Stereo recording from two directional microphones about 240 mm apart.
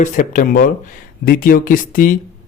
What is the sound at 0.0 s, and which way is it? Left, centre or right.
Speech, left.